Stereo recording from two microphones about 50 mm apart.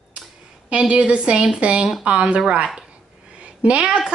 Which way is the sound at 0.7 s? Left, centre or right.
Right.